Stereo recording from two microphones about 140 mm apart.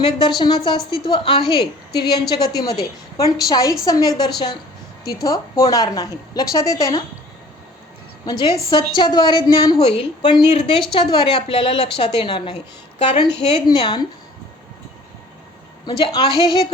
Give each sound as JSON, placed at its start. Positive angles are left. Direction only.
{"t": 0.0, "sound": "a woman's voice", "side_deg": 35}
{"t": 8.2, "sound": "a woman's voice", "side_deg": 30}
{"t": 15.9, "sound": "a woman's voice", "side_deg": 35}